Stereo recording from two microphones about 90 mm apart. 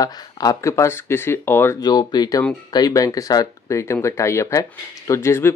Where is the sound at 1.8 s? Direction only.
50° left (ahead or behind).